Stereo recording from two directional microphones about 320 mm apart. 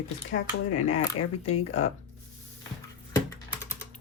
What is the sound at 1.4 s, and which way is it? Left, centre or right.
Speech, centre.